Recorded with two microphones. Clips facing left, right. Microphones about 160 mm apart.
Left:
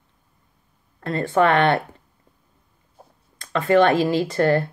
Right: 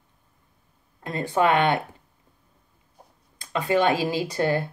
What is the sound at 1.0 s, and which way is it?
Speech, 15° right (ahead or behind).